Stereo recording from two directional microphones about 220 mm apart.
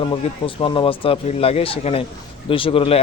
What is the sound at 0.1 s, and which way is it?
A man's voice, 20° left (ahead or behind).